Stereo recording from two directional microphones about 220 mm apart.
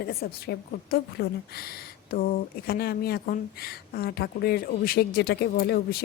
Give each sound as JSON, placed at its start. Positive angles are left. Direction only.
{"t": 0.0, "sound": "a woman's voice", "side_deg": 45}